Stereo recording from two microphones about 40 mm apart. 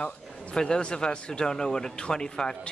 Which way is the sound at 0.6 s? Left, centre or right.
Left.